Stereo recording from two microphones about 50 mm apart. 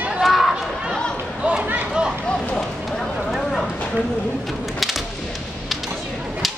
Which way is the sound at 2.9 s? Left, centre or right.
Centre.